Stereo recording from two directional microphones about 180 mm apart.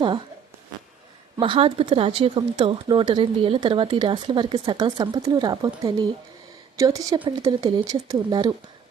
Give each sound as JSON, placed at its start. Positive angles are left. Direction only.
{"t": 1.4, "sound": "speech", "side_deg": -30}
{"t": 6.7, "sound": "speech", "side_deg": -20}